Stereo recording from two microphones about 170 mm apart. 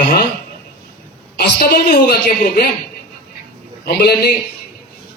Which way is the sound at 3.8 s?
70° left (ahead or behind).